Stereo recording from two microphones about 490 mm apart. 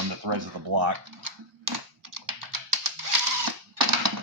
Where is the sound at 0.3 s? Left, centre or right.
Right.